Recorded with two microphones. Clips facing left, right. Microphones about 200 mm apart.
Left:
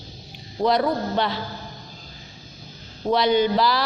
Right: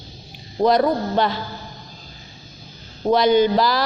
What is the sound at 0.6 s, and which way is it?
Speech, 45° right (ahead or behind).